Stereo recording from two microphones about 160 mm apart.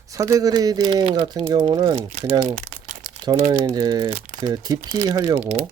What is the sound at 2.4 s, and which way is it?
Crumpling, 50° right (ahead or behind).